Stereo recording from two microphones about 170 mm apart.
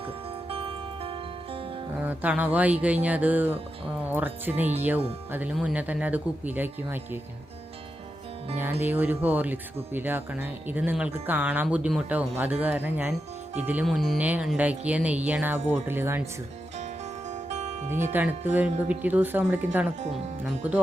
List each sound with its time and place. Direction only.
0.0 s music: 35° right (ahead or behind)
2.0 s speech: 10° right (ahead or behind)
8.8 s speech: 10° right (ahead or behind)
13.8 s speech: centre (ahead or behind)
16.7 s music: 40° right (ahead or behind)
18.1 s speech: 10° right (ahead or behind)